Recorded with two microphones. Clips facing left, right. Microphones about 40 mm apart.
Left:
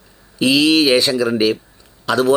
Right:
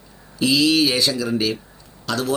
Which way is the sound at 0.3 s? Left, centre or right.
Left.